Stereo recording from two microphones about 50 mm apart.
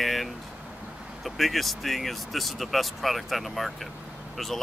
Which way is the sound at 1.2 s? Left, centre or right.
Centre.